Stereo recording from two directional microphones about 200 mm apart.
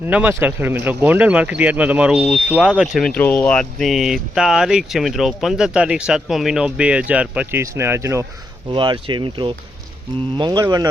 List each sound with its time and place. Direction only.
0.1 s speech: 10° right (ahead or behind)
8.7 s speech: 25° right (ahead or behind)